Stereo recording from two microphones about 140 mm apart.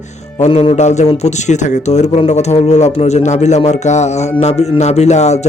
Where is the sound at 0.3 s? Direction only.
50° left (ahead or behind).